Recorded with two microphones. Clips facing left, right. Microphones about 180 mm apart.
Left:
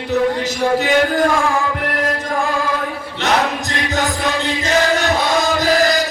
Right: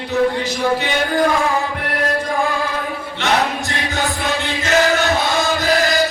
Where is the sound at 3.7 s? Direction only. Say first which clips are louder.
Left 2 dB; 40° left (ahead or behind).